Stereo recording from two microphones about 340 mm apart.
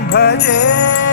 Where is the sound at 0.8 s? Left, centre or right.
Left.